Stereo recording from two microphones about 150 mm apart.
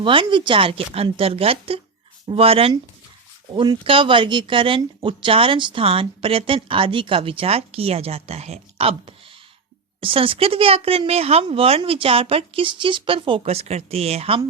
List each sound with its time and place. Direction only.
0.0 s speech: 35° right (ahead or behind)